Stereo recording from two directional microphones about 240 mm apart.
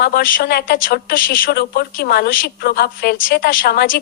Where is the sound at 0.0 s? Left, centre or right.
Left.